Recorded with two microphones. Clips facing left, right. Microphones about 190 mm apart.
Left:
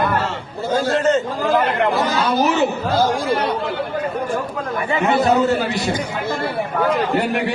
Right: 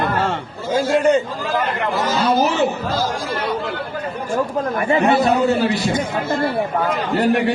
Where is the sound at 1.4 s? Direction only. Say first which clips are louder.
Left 4 dB; 60° left (ahead or behind).